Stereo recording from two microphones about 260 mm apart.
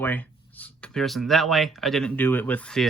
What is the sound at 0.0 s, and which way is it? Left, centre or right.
Speech, centre.